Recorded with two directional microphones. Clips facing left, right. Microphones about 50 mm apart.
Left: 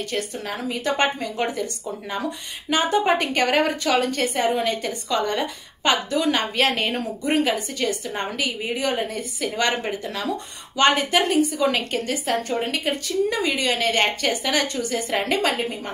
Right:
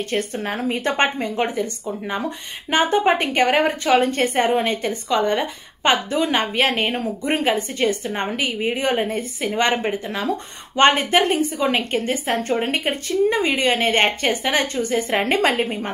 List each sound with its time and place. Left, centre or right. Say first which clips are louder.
0.1 s a woman's voice: right 4 dB; right
4.8 s a woman's voice: right 4 dB; right